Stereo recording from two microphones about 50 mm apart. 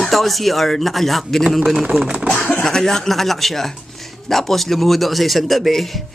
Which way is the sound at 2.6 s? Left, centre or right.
Centre.